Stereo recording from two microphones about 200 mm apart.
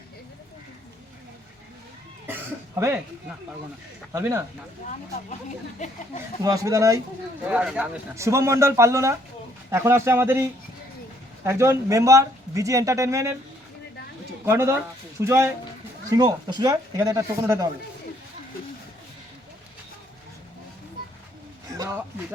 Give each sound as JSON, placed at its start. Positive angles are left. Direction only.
{"t": 2.2, "sound": "cough", "side_deg": -10}
{"t": 4.1, "sound": "speech", "side_deg": -15}
{"t": 6.4, "sound": "speech", "side_deg": -15}
{"t": 7.4, "sound": "speech", "side_deg": -5}
{"t": 11.4, "sound": "speech", "side_deg": -15}
{"t": 14.4, "sound": "speech", "side_deg": -15}